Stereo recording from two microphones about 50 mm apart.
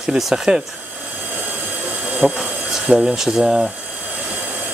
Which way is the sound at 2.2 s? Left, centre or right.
Centre.